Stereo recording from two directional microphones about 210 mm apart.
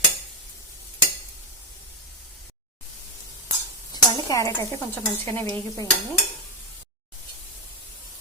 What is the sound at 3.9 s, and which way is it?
Speech, 15° left (ahead or behind).